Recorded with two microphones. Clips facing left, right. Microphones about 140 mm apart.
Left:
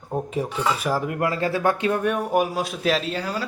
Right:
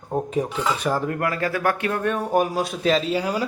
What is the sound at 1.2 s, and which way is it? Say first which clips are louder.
Speech: left 1 dB; 25° left (ahead or behind).